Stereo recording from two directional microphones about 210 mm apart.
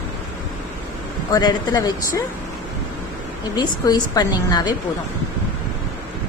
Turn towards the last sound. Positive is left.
turn(degrees=20)  # may be behind; listen again after turning